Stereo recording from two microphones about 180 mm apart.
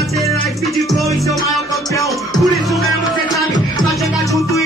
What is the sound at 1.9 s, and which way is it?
Music, 15° left (ahead or behind).